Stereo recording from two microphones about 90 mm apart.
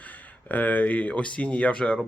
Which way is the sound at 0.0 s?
20° left (ahead or behind).